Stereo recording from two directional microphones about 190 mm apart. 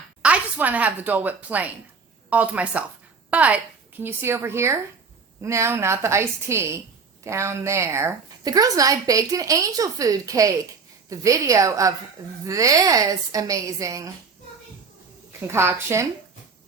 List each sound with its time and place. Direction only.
0.2 s a woman's voice: 5° right (ahead or behind)
15.4 s a woman's voice: 15° right (ahead or behind)